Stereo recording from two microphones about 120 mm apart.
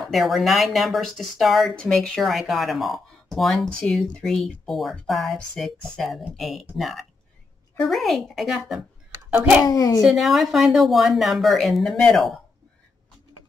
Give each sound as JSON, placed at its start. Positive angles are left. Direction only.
{"t": 0.0, "sound": "speech", "side_deg": 0}
{"t": 9.7, "sound": "a child's voice", "side_deg": 30}
{"t": 10.0, "sound": "speech", "side_deg": 0}